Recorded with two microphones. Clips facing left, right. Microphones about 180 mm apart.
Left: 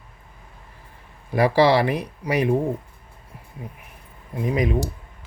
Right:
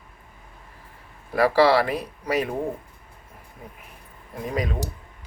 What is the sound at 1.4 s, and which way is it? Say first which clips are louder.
Speech: left 1 dB; 15° left (ahead or behind).